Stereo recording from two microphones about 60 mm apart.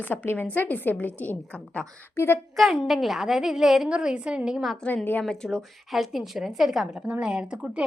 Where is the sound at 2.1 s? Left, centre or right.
Left.